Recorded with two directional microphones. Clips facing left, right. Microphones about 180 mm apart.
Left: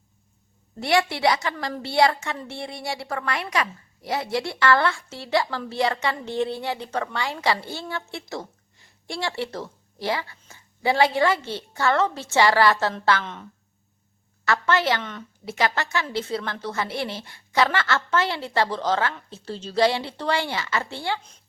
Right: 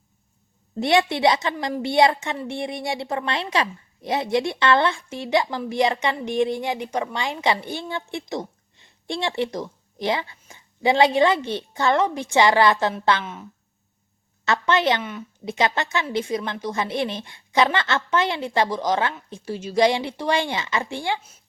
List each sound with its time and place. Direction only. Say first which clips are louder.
0.8 s a woman's voice: right 3 dB; 20° right (ahead or behind)
14.4 s a woman's voice: right 2 dB; 20° right (ahead or behind)
15.0 s speech: right 4 dB; 10° right (ahead or behind)
15.5 s a woman's voice: right 2 dB; 20° right (ahead or behind)